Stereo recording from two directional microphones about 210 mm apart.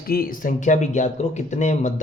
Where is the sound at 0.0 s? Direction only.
45° left (ahead or behind).